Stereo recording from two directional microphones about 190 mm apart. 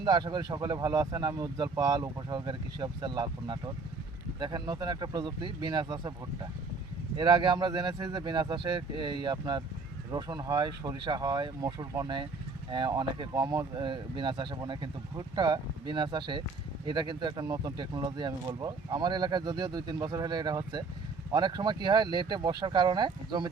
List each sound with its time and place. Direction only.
0.0 s speech: 20° right (ahead or behind)